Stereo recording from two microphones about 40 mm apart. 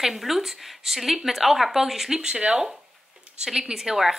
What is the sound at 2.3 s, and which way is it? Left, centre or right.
Speech, right.